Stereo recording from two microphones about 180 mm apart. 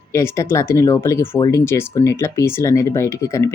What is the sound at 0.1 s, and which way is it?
Speech, 15° left (ahead or behind).